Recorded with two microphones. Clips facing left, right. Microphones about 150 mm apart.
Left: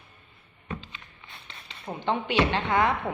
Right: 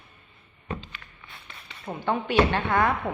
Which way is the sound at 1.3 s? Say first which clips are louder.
Even; 20° left (ahead or behind).